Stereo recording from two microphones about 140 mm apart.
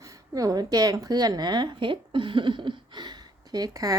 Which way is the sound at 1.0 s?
30° right (ahead or behind).